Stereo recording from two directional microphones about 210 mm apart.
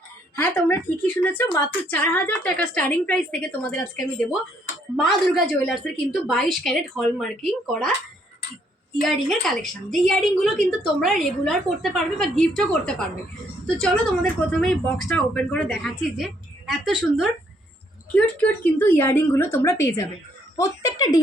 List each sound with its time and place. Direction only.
0.3 s a woman's voice: 10° left (ahead or behind)
9.0 s a woman's voice: centre (ahead or behind); by 21.2 s 15° left (ahead or behind)